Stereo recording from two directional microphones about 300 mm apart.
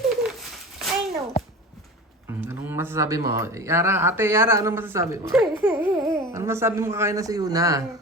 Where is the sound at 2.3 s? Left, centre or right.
Centre.